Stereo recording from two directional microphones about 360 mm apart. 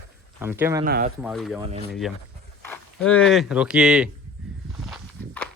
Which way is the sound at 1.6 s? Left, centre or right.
Centre.